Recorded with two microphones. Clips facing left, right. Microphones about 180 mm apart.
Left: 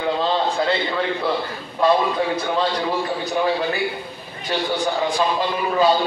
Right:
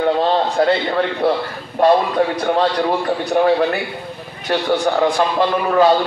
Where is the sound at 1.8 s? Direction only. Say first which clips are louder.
Right 4 dB; 65° right (ahead or behind).